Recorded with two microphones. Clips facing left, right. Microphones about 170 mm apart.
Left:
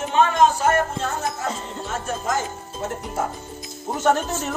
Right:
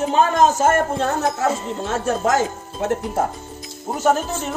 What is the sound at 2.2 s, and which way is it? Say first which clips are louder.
Speech: right 6 dB; 75° right (ahead or behind).